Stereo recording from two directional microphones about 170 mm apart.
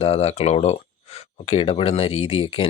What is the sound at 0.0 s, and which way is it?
Speech, 35° left (ahead or behind).